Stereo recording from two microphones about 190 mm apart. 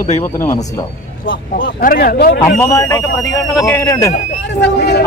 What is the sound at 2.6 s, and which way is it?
Speech, 15° left (ahead or behind).